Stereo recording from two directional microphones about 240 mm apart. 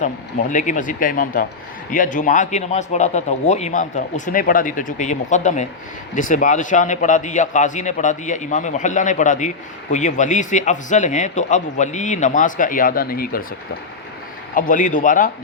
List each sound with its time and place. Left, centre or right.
0.0 s speech: left
14.5 s speech: left